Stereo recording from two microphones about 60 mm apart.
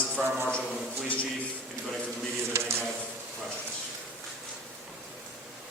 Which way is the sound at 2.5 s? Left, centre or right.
Right.